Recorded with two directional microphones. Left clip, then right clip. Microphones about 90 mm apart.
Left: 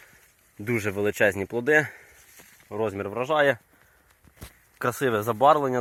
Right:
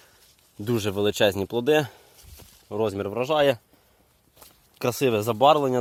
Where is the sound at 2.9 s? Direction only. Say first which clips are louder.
Right 1 dB; 35° right (ahead or behind).